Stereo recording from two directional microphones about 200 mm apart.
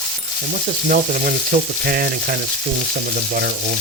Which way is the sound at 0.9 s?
40° right (ahead or behind).